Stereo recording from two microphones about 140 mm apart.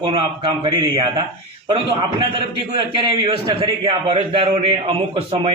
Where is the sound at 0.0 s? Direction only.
35° right (ahead or behind).